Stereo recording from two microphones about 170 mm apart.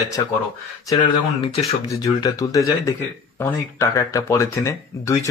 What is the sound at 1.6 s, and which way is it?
Speech, 20° left (ahead or behind).